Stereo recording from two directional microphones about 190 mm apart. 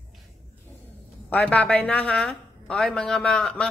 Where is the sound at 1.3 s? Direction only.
5° left (ahead or behind).